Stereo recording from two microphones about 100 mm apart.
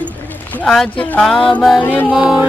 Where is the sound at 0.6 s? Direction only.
5° left (ahead or behind).